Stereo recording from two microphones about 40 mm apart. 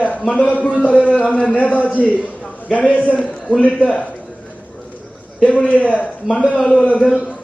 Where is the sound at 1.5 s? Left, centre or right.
Left.